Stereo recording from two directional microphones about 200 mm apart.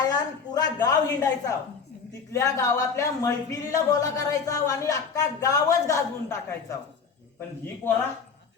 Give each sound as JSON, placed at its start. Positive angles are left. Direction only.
{"t": 0.0, "sound": "a woman's voice", "side_deg": 20}